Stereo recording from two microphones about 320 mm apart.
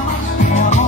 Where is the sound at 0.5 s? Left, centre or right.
Left.